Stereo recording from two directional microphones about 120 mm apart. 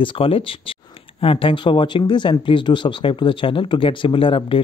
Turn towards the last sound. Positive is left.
turn(degrees=45)  # may be behind; listen again after turning